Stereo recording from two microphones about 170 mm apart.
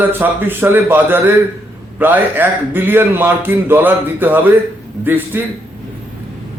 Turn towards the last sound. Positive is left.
turn(degrees=-10)  # may be behind; listen again after turning